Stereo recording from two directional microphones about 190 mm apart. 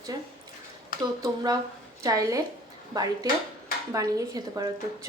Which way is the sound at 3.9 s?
20° right (ahead or behind).